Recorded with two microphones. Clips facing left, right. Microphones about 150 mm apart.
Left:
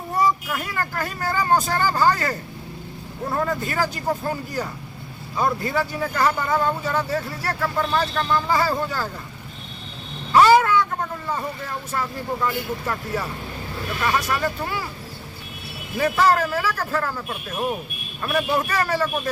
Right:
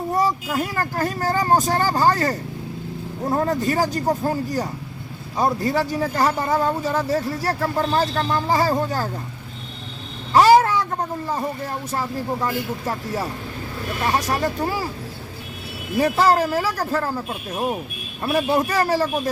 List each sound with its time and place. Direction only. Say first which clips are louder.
0.2 s speech: left 1 dB; 35° right (ahead or behind)
10.3 s speech: right 1 dB; 40° right (ahead or behind)
16.0 s speech: right 2 dB; 35° right (ahead or behind)